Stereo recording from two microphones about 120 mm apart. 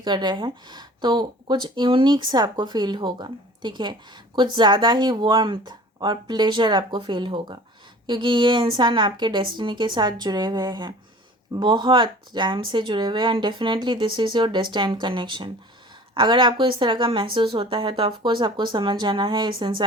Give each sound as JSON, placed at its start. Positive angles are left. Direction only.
{"t": 0.0, "sound": "speech", "side_deg": -40}